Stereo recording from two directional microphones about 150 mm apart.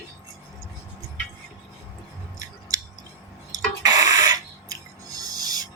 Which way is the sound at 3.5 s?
25° right (ahead or behind).